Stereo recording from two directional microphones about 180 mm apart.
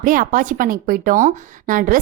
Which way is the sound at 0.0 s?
50° right (ahead or behind).